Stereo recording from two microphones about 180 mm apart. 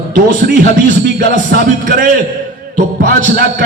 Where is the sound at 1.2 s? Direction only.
55° right (ahead or behind).